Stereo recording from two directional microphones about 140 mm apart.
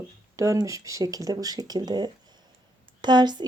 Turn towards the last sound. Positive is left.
turn(degrees=-30)  # may be behind; listen again after turning